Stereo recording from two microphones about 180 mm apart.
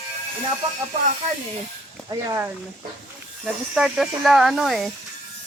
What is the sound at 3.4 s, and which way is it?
Speech, 5° right (ahead or behind).